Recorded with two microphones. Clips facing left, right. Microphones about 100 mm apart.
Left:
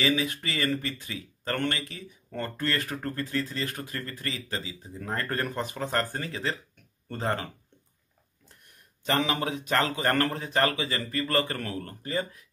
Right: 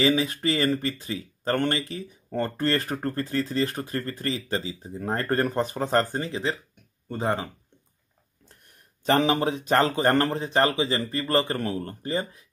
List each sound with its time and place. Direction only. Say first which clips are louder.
0.0 s speech: right 5 dB; 35° right (ahead or behind); by 7.4 s 15° right (ahead or behind)
9.0 s a man's voice: right 6 dB; 35° right (ahead or behind)